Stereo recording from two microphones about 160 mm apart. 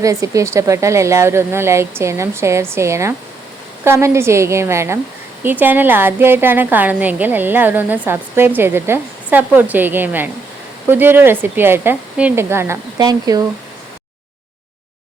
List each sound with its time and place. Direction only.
0.0 s a woman's voice: 20° right (ahead or behind)